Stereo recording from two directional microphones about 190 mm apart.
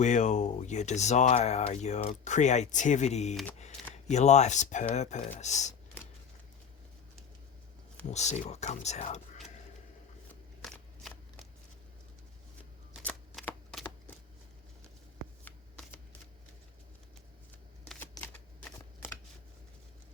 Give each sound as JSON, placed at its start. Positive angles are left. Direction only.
{"t": 0.0, "sound": "speech", "side_deg": 40}
{"t": 8.1, "sound": "speech", "side_deg": 35}
{"t": 10.6, "sound": "shuffling cards", "side_deg": 0}
{"t": 13.0, "sound": "shuffling cards", "side_deg": 10}
{"t": 18.1, "sound": "shuffling cards", "side_deg": 10}